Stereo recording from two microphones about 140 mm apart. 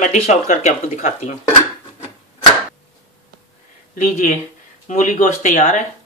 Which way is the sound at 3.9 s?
60° left (ahead or behind).